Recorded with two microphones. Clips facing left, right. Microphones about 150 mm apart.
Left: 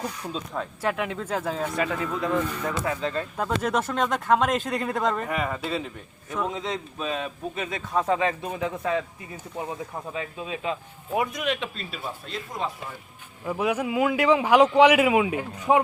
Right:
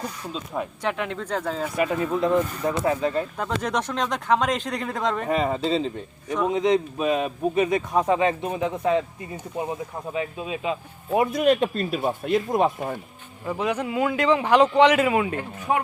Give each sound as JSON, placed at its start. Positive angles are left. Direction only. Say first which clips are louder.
{"t": 0.8, "sound": "speech", "louder": "left 3 dB", "side_deg": 5}
{"t": 1.7, "sound": "a man's voice", "louder": "right 4 dB", "side_deg": -20}
{"t": 3.0, "sound": "speech", "louder": "right 4 dB", "side_deg": -15}
{"t": 3.3, "sound": "speech", "louder": "left 1 dB", "side_deg": 5}
{"t": 5.3, "sound": "a man's voice", "louder": "right 5 dB", "side_deg": -25}
{"t": 11.2, "sound": "speech", "louder": "right 8 dB", "side_deg": -35}
{"t": 13.5, "sound": "speech", "louder": "even", "side_deg": 10}
{"t": 15.7, "sound": "speech", "louder": "left 4 dB", "side_deg": 20}